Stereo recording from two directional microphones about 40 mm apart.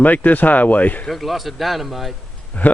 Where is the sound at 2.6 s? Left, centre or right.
Left.